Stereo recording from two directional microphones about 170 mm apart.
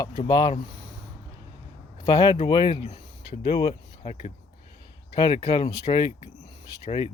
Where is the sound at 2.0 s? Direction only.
30° left (ahead or behind).